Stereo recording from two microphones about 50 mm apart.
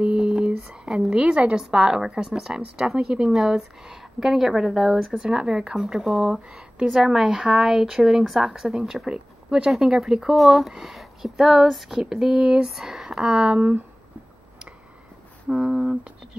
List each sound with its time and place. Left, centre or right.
0.0 s whispering: right
0.7 s a sound: centre
1.1 s a woman's voice: centre
1.6 s speech: centre
11.9 s speech: centre
12.6 s speech: centre
13.6 s speech: right
15.4 s speech: centre
15.7 s speech: centre